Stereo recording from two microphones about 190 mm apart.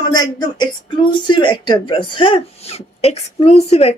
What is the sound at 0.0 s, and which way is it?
A woman's voice, 20° left (ahead or behind).